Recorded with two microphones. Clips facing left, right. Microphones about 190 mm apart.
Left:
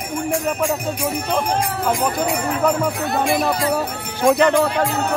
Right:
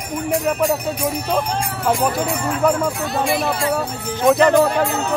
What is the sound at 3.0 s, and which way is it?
Speech, 55° left (ahead or behind).